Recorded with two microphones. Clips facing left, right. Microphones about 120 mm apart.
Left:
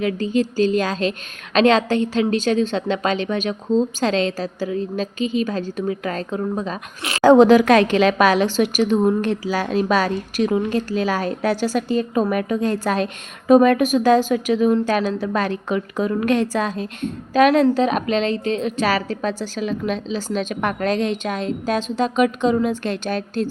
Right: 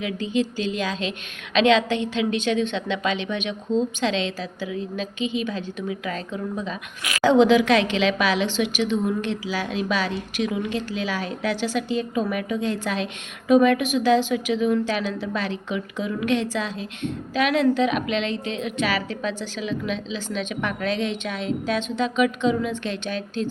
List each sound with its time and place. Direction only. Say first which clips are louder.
0.0 s a woman's voice: left 4 dB; 40° left (ahead or behind)
7.0 s a woman's voice: left 3 dB; 30° left (ahead or behind)
7.3 s a woman's voice: left 5 dB; 45° left (ahead or behind)